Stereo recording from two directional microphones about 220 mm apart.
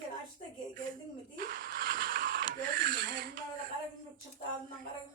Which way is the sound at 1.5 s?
40° right (ahead or behind).